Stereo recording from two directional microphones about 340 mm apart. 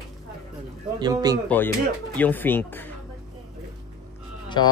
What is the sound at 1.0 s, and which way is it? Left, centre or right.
Speech, centre.